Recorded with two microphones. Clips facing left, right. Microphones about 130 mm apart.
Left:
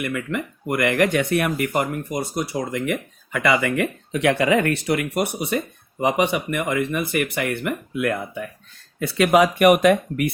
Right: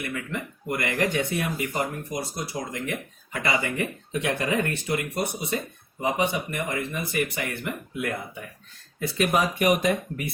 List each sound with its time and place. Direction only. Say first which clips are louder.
0.0 s speech: left 6 dB; 70° left (ahead or behind)
9.0 s speech: left 7 dB; 85° left; by 10.3 s 70° left (ahead or behind)